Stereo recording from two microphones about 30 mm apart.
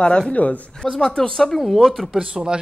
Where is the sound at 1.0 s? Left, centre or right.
Left.